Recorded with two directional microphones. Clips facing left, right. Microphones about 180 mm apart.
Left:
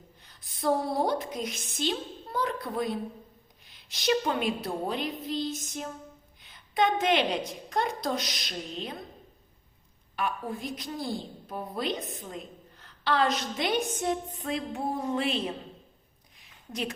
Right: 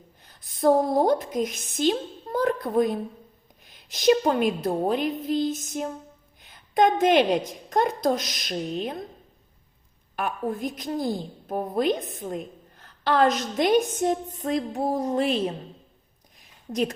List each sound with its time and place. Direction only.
0.6 s a woman's voice: 45° right (ahead or behind)
10.2 s a woman's voice: 45° right (ahead or behind)